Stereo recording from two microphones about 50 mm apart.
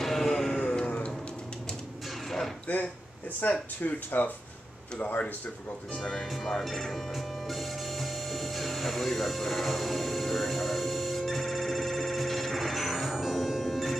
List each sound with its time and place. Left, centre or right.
0.0 s a sound: centre
0.7 s a sound: centre
2.2 s music: centre
3.4 s speech: left
5.9 s speech: centre
6.3 s printer: centre